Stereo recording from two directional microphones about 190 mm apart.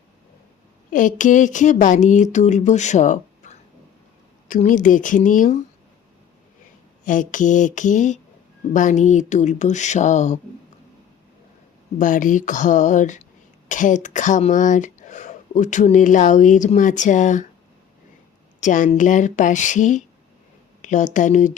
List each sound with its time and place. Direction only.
0.9 s speech: 45° left (ahead or behind)
7.0 s speech: 45° left (ahead or behind)
11.9 s speech: 45° left (ahead or behind)
18.6 s speech: 40° left (ahead or behind)